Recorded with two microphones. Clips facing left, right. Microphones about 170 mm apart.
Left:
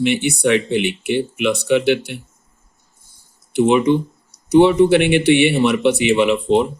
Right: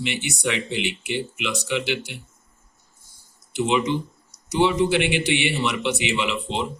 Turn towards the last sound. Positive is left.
turn(degrees=55)  # may be behind; listen again after turning